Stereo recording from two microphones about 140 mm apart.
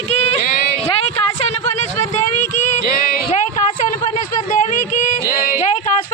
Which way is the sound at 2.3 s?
60° left (ahead or behind).